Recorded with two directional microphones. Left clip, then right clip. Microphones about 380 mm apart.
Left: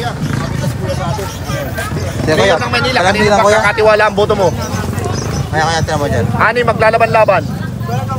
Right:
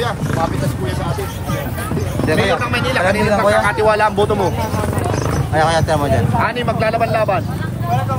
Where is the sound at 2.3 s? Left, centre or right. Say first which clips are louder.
Left 6 dB; centre.